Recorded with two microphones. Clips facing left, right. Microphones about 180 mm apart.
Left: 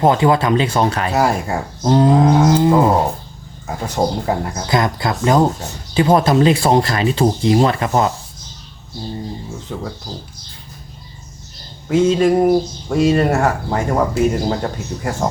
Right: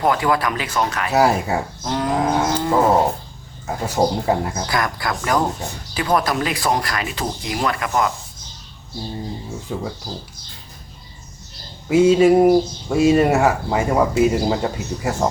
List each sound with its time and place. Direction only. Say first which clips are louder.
0.0 s speech: left 5 dB; 25° left (ahead or behind)
1.1 s speech: even; 5° right (ahead or behind)
1.8 s speech: left 12 dB; 30° left (ahead or behind)
2.6 s dog: left 5 dB; 20° left (ahead or behind)
3.7 s speech: even; 5° right (ahead or behind)
4.7 s speech: left 7 dB; 25° left (ahead or behind)
9.7 s speech: right 1 dB; 5° right (ahead or behind)
11.9 s speech: right 1 dB; 10° right (ahead or behind)